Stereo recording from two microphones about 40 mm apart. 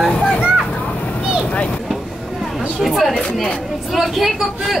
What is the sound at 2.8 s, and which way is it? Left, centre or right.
A woman's voice, centre.